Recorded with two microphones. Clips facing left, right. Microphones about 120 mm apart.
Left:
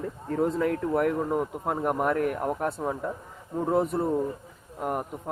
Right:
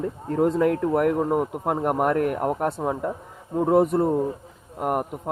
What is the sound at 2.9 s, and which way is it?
Speech, 65° right (ahead or behind).